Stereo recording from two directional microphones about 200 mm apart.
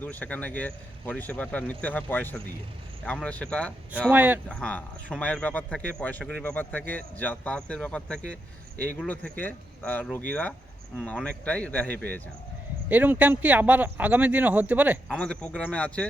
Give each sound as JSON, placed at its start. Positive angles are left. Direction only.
{"t": 0.0, "sound": "speech", "side_deg": 5}
{"t": 4.1, "sound": "speech", "side_deg": -10}
{"t": 4.4, "sound": "speech", "side_deg": 5}
{"t": 12.9, "sound": "speech", "side_deg": -10}
{"t": 15.1, "sound": "speech", "side_deg": 5}